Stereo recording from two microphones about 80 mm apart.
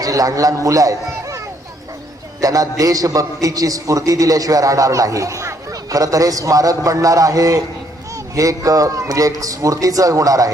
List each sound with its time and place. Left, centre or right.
0.0 s a man's voice: right
2.4 s a man's voice: right